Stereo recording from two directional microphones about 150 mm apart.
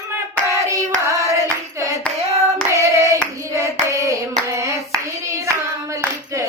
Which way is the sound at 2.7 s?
20° right (ahead or behind).